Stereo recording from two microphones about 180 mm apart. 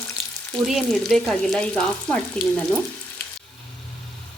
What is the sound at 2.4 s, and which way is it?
Speech, 5° left (ahead or behind).